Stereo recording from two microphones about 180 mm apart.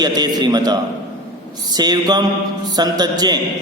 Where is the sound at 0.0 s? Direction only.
20° right (ahead or behind).